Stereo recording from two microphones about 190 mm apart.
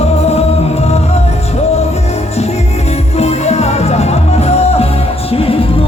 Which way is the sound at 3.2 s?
35° left (ahead or behind).